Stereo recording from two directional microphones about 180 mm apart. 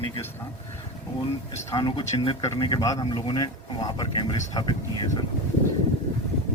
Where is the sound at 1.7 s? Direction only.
20° left (ahead or behind).